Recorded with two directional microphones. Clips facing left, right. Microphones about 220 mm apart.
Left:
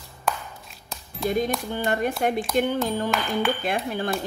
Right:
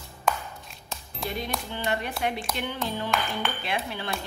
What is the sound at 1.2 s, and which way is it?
Speech, 45° left (ahead or behind).